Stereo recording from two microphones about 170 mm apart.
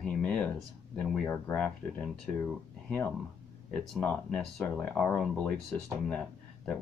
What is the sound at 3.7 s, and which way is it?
Speech, 5° left (ahead or behind).